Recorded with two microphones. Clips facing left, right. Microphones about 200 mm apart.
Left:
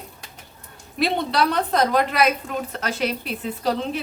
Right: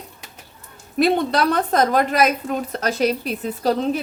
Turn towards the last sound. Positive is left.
turn(degrees=-40)  # may be behind; listen again after turning